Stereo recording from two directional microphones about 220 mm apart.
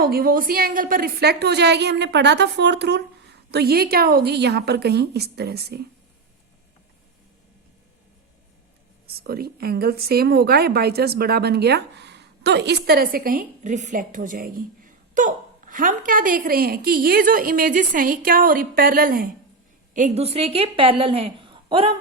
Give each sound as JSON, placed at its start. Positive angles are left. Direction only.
{"t": 0.0, "sound": "a woman's voice", "side_deg": -45}
{"t": 9.0, "sound": "a woman's voice", "side_deg": -45}